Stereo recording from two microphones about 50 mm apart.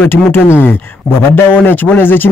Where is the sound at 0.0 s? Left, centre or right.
Left.